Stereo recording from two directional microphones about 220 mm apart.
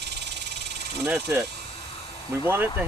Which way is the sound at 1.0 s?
5° right (ahead or behind).